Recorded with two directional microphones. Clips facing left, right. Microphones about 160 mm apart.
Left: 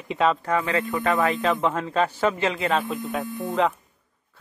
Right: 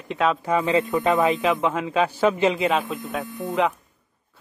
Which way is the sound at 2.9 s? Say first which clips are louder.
Left 1 dB; centre (ahead or behind).